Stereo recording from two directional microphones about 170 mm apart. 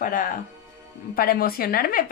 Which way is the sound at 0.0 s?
55° left (ahead or behind).